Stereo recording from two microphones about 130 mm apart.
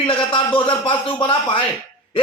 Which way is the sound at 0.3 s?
40° left (ahead or behind).